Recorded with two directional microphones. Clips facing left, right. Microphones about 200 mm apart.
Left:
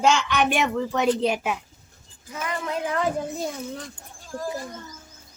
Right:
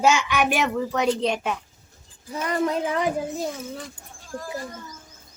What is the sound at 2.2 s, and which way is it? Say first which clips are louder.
Speech: right 6 dB; 35° right (ahead or behind).